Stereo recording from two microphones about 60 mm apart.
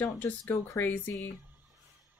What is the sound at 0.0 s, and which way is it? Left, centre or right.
Speech, left.